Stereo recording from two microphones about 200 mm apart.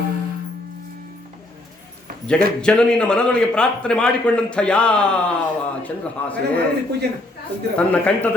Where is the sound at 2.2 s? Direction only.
5° left (ahead or behind).